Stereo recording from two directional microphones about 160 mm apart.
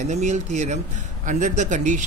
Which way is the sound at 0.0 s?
45° right (ahead or behind).